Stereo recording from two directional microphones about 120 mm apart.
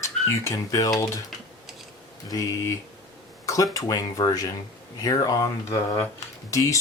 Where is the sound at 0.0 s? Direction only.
25° left (ahead or behind).